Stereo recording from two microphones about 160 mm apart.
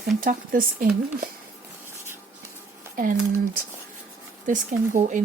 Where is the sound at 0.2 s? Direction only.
60° right (ahead or behind).